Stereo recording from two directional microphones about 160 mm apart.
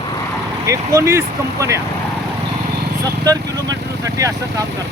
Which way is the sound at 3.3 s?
20° right (ahead or behind).